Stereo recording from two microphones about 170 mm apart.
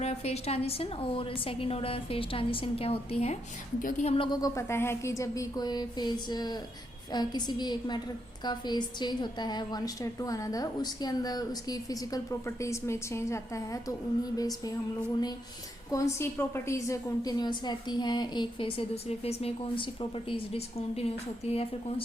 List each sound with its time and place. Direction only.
0.0 s a woman's voice: 40° left (ahead or behind)
3.8 s a woman's voice: 50° left (ahead or behind); by 14.7 s 20° left (ahead or behind)
15.9 s a woman's voice: 15° left (ahead or behind); by 22.0 s 35° left (ahead or behind)